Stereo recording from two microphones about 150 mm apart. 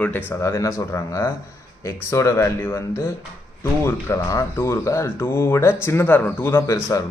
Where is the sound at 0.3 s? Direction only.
20° left (ahead or behind).